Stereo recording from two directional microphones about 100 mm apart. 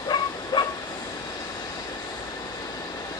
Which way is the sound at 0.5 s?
50° left (ahead or behind).